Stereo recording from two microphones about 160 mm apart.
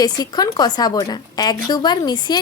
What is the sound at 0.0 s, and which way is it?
A woman's voice, 25° left (ahead or behind).